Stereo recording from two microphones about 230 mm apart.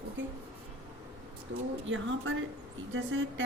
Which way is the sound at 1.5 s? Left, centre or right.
Right.